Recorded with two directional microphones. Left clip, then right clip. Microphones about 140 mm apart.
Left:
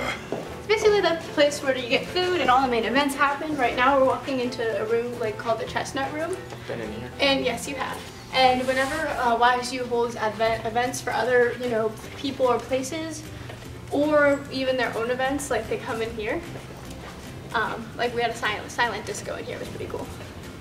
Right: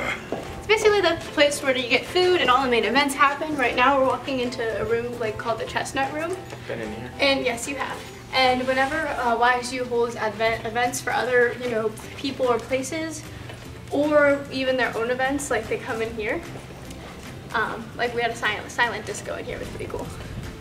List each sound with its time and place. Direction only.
0.7 s a woman's voice: 10° right (ahead or behind)
17.5 s a woman's voice: centre (ahead or behind)